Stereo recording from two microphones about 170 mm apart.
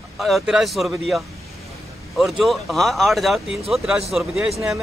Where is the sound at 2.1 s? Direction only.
Centre (ahead or behind).